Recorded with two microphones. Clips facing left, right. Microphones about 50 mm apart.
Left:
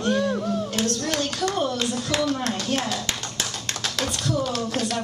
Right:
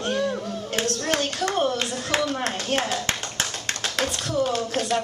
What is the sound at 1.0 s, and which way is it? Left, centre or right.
A woman's voice, right.